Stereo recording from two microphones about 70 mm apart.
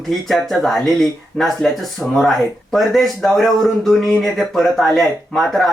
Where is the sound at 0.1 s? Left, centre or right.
Centre.